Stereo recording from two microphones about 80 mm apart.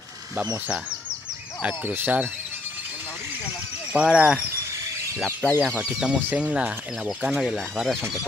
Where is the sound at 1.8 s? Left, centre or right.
Right.